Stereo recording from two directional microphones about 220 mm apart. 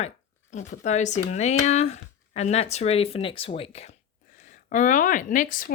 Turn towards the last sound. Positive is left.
turn(degrees=40)  # may be behind; listen again after turning